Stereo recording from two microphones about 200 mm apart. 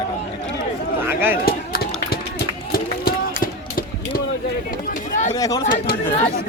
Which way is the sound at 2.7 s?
45° left (ahead or behind).